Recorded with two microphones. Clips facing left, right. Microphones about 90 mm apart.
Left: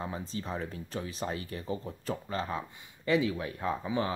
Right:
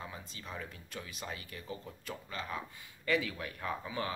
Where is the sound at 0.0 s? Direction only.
35° left (ahead or behind).